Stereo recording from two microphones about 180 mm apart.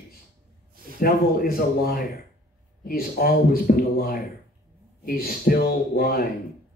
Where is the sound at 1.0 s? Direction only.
55° left (ahead or behind).